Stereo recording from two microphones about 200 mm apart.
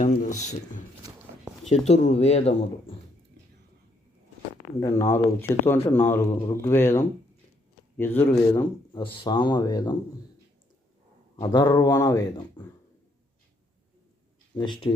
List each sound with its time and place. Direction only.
0.0 s speech: 40° left (ahead or behind)
4.8 s speech: 10° left (ahead or behind)
8.5 s speech: 20° left (ahead or behind)
11.4 s speech: 20° left (ahead or behind)
14.5 s speech: 25° left (ahead or behind)